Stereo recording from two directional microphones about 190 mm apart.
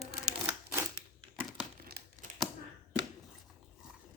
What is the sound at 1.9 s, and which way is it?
Crumpling, 55° right (ahead or behind).